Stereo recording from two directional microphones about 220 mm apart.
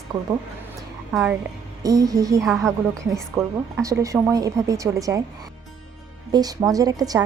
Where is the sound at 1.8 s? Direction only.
15° right (ahead or behind).